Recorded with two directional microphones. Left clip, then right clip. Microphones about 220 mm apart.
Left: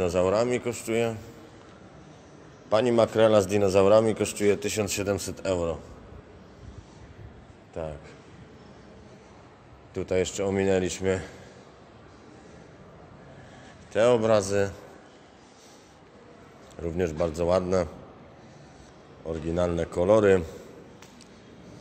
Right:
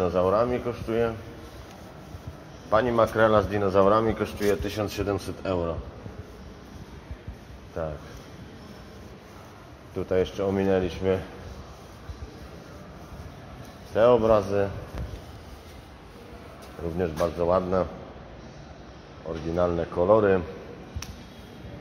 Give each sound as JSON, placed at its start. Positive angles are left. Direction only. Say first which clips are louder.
{"t": 0.0, "sound": "speech", "louder": "right 1 dB", "side_deg": 50}
{"t": 2.7, "sound": "speech", "louder": "even", "side_deg": 60}
{"t": 9.9, "sound": "speech", "louder": "right 1 dB", "side_deg": 45}
{"t": 13.9, "sound": "speech", "louder": "right 2 dB", "side_deg": 40}
{"t": 16.9, "sound": "speech", "louder": "right 1 dB", "side_deg": 55}
{"t": 19.2, "sound": "speech", "louder": "right 2 dB", "side_deg": 50}